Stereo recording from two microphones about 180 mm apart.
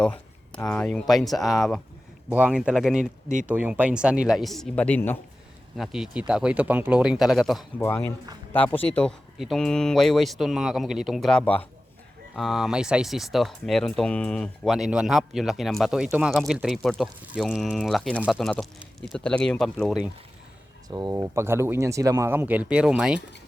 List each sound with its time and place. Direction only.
0.0 s speech: 5° left (ahead or behind)
3.0 s speech: 45° right (ahead or behind)
3.4 s speech: 10° right (ahead or behind); by 5.1 s 10° left (ahead or behind)
5.7 s speech: centre (ahead or behind)
7.8 s speech: 15° left (ahead or behind)
20.8 s speech: 20° right (ahead or behind); by 23.2 s 5° right (ahead or behind)